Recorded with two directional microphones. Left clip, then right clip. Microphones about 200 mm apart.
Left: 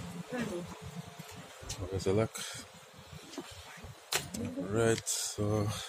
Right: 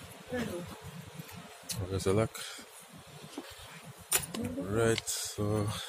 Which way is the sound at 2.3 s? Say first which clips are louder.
Left 1 dB; centre (ahead or behind).